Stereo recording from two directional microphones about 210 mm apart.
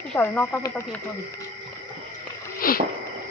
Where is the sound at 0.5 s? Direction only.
15° left (ahead or behind).